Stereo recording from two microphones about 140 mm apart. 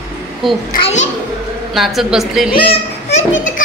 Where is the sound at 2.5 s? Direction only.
40° left (ahead or behind); by 3.6 s 60° left (ahead or behind).